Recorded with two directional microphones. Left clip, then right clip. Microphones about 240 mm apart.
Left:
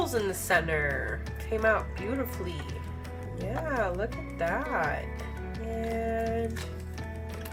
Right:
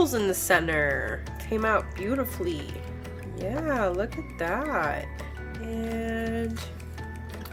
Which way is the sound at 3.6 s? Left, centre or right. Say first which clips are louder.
Right 3 dB; right.